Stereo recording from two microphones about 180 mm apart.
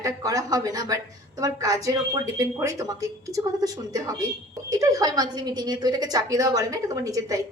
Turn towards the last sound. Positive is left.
turn(degrees=-20)  # may be behind; listen again after turning